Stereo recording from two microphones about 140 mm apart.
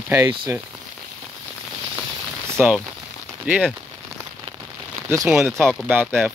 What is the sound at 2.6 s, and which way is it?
Speech, 15° right (ahead or behind).